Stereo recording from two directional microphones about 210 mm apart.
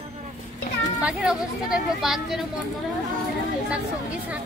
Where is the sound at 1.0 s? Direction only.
5° right (ahead or behind).